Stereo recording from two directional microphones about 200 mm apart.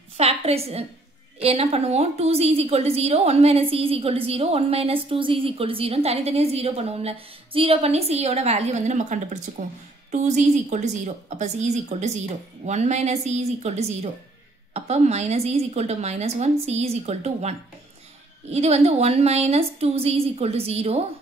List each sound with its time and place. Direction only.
0.2 s a woman's voice: 30° right (ahead or behind)